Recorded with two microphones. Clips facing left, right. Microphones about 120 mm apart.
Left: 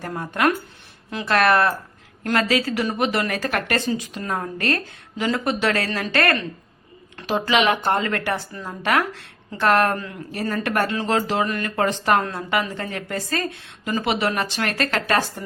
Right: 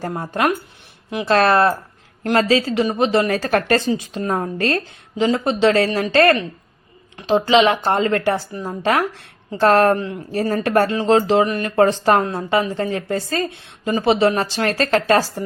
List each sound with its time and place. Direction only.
0.0 s speech: 30° right (ahead or behind)
11.8 s speech: 35° right (ahead or behind)